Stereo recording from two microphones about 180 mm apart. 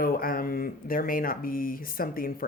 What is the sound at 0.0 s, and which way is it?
Speech, 55° left (ahead or behind).